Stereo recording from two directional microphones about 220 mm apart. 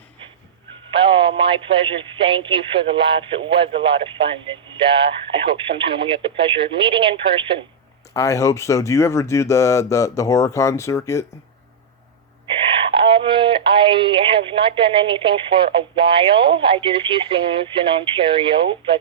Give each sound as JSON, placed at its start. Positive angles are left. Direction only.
{"t": 0.9, "sound": "speech", "side_deg": -25}
{"t": 8.1, "sound": "speech", "side_deg": 15}
{"t": 12.6, "sound": "speech", "side_deg": -25}